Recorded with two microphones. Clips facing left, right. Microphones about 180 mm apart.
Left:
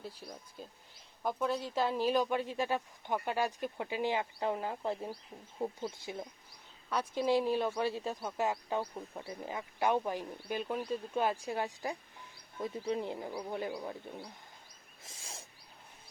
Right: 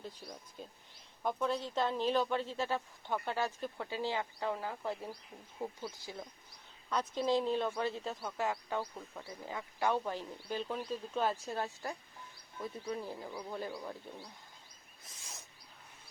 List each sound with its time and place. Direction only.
0.0 s speech: 5° left (ahead or behind); by 6.2 s 25° left (ahead or behind)
6.9 s speech: 10° left (ahead or behind)
15.0 s owl: 30° left (ahead or behind)